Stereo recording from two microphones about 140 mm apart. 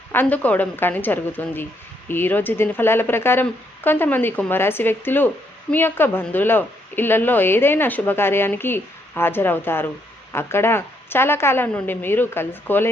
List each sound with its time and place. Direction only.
0.1 s a woman's voice: 10° left (ahead or behind)